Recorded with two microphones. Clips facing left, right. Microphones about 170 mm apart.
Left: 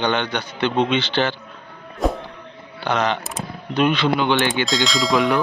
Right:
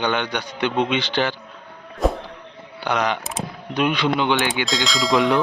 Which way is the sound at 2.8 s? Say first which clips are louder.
Left 1 dB; 10° right (ahead or behind).